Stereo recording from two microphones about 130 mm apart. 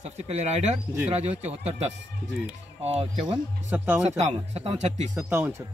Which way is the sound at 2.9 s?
55° right (ahead or behind).